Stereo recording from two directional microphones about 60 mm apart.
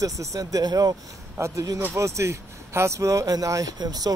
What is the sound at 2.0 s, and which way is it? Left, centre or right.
Speech, right.